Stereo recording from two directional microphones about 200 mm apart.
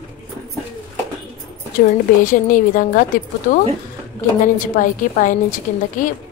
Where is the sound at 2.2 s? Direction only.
40° left (ahead or behind).